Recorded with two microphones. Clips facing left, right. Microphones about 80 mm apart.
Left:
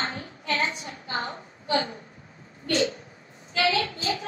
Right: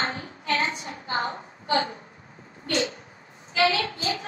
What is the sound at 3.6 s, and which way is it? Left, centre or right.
Speech, right.